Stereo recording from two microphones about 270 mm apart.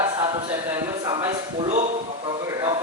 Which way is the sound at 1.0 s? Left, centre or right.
Centre.